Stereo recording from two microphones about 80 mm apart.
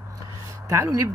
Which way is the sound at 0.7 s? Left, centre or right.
Right.